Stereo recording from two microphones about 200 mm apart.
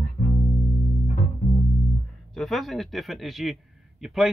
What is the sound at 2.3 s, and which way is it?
Speech, centre (ahead or behind).